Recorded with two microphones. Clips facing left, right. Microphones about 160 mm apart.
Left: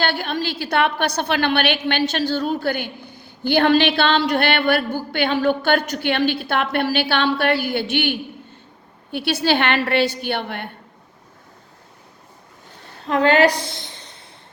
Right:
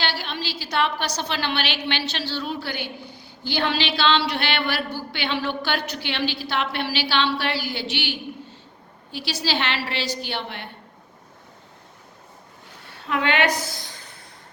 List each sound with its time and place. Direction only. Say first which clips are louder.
0.0 s a woman's voice: left 6 dB; 50° left (ahead or behind)
13.0 s a woman's voice: left 7 dB; 35° left (ahead or behind)